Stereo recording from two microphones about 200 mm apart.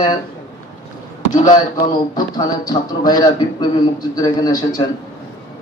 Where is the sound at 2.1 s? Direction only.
20° left (ahead or behind).